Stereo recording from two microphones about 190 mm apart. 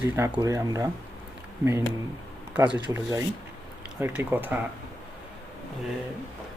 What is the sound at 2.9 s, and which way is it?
Speech, 15° right (ahead or behind).